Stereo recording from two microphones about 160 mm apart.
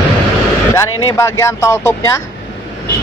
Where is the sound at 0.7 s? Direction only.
15° left (ahead or behind).